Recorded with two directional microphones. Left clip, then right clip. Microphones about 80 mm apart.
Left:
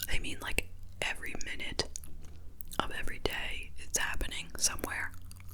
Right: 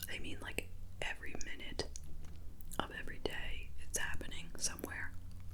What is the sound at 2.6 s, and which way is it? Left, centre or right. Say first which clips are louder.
Whispering: left 7 dB; left.